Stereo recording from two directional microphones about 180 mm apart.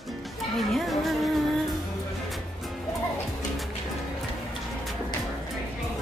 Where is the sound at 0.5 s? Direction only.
Centre (ahead or behind).